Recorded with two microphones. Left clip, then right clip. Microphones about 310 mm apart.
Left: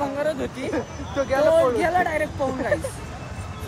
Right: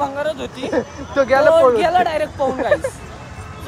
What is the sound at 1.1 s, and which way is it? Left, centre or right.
Speech, right.